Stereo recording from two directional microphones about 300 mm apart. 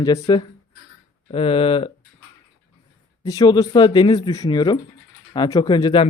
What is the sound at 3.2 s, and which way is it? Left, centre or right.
A man's voice, centre.